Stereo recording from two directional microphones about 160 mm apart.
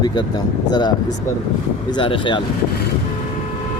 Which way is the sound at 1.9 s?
30° left (ahead or behind).